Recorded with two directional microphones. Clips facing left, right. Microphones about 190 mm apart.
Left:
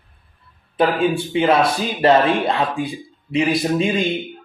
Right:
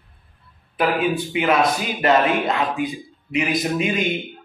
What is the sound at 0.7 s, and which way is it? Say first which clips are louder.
Speech: left 3 dB; 30° left (ahead or behind).